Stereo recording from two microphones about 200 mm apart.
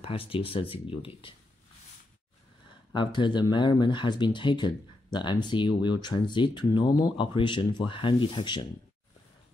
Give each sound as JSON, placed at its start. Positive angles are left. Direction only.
{"t": 0.0, "sound": "speech", "side_deg": 25}
{"t": 2.9, "sound": "speech", "side_deg": 25}